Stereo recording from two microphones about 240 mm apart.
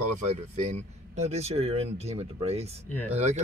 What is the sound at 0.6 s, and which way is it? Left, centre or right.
Speech, right.